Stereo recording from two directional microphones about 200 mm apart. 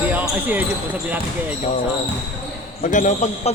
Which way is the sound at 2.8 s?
40° left (ahead or behind).